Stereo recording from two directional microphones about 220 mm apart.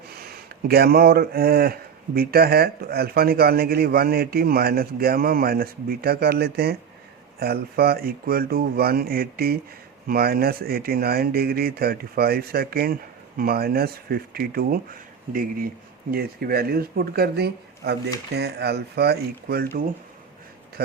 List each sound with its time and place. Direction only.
0.2 s speech: 45° right (ahead or behind)